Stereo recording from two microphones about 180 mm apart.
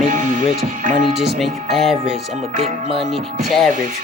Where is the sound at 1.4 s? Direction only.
Centre (ahead or behind).